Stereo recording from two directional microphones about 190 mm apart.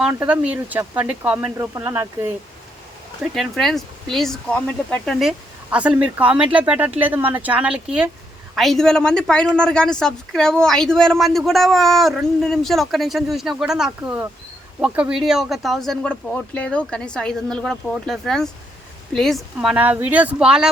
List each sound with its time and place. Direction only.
0.0 s speech: 10° right (ahead or behind)
3.3 s speech: centre (ahead or behind)
5.7 s speech: 5° right (ahead or behind)